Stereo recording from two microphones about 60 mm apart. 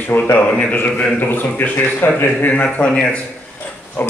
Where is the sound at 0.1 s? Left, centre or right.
Left.